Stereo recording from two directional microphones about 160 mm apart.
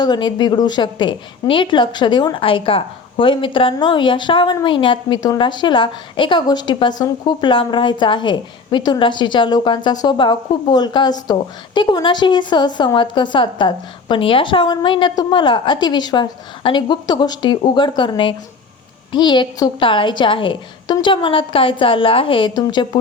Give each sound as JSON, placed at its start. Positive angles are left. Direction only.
{"t": 0.0, "sound": "a woman's voice", "side_deg": 30}